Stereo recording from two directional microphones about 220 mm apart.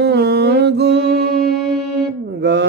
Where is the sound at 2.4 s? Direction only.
50° right (ahead or behind).